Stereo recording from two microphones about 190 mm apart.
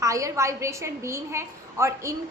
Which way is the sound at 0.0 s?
15° right (ahead or behind).